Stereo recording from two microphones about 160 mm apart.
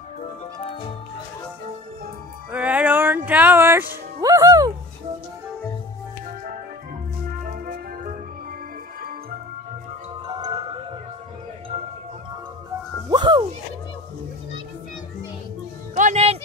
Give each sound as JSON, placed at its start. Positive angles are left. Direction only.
{"t": 2.5, "sound": "music", "side_deg": -10}
{"t": 7.4, "sound": "organ", "side_deg": -60}
{"t": 10.2, "sound": "music", "side_deg": -25}
{"t": 13.1, "sound": "music", "side_deg": -30}
{"t": 16.0, "sound": "music", "side_deg": -45}